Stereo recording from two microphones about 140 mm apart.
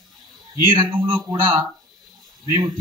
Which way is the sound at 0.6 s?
15° right (ahead or behind).